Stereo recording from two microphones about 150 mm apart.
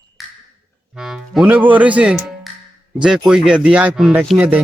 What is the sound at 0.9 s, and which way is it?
A man's voice, 5° right (ahead or behind).